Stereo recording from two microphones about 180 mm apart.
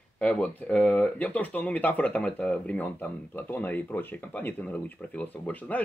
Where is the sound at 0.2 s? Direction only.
5° left (ahead or behind).